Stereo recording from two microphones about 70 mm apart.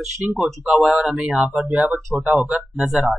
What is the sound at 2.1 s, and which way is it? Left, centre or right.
Speech, centre.